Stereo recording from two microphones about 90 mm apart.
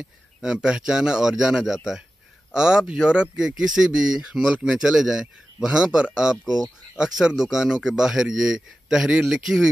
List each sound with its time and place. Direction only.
0.0 s a man's voice: 10° right (ahead or behind)